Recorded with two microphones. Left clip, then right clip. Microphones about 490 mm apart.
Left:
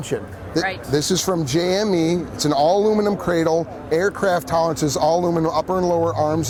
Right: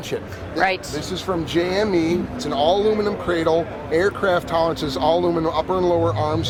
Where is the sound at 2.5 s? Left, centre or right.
Left.